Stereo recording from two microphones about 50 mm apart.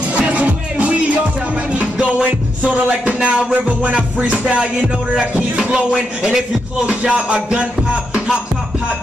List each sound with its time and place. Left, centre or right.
0.1 s music: right
5.6 s speech: centre
6.9 s music: right